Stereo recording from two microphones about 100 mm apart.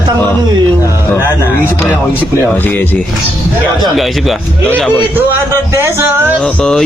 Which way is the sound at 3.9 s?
Centre (ahead or behind).